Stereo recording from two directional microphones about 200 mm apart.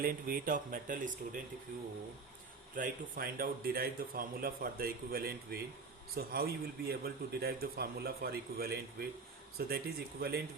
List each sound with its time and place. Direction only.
0.0 s speech: 45° right (ahead or behind)
2.7 s speech: 45° right (ahead or behind)